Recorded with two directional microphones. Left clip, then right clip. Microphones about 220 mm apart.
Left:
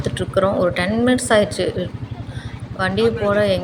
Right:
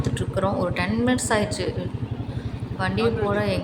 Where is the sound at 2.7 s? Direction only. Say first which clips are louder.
Left 5 dB; 15° left (ahead or behind).